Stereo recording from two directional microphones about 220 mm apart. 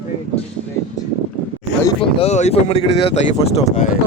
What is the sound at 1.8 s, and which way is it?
Speech, 25° left (ahead or behind).